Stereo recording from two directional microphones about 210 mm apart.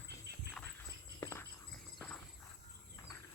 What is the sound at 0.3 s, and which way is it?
Dog, 50° right (ahead or behind).